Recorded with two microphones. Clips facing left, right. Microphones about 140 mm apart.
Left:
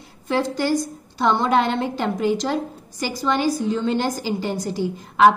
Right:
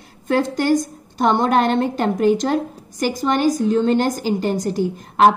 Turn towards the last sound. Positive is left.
turn(degrees=-50)  # may be behind; listen again after turning